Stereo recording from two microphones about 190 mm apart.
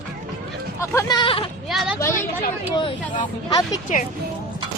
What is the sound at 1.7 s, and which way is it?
Speech, centre (ahead or behind).